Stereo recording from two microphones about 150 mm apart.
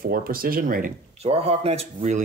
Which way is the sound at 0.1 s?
75° right (ahead or behind).